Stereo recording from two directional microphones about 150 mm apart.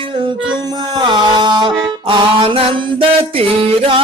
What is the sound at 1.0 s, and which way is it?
Mantra, 30° right (ahead or behind).